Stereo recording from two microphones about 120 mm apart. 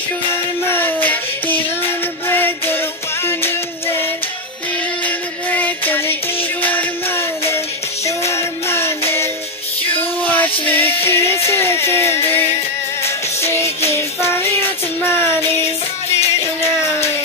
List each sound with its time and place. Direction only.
0.3 s music: 20° left (ahead or behind)
5.0 s music: 15° left (ahead or behind)